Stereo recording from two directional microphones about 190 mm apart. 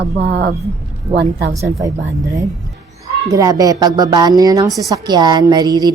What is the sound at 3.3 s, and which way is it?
A woman's voice, 20° right (ahead or behind).